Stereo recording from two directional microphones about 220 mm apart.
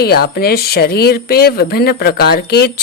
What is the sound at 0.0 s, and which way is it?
Speech, 45° left (ahead or behind).